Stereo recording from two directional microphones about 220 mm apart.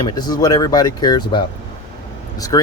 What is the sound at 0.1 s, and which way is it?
Speech, 20° left (ahead or behind).